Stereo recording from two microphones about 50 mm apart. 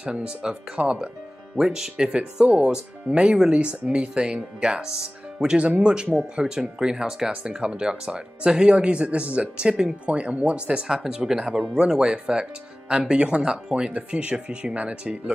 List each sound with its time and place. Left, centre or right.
0.0 s speech: centre
2.0 s speech: right